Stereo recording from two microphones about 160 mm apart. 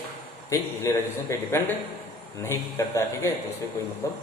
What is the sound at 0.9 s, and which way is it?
Speech, 20° left (ahead or behind).